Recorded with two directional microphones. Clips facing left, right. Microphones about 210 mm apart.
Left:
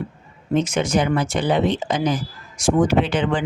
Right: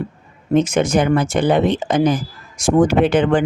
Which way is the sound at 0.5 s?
50° right (ahead or behind).